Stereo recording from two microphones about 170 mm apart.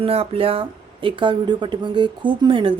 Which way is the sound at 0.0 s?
35° right (ahead or behind).